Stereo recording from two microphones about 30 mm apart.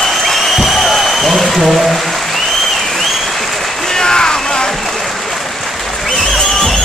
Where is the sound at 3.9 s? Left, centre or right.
Left.